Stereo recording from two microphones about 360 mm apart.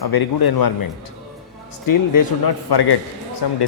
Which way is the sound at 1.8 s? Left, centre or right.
Left.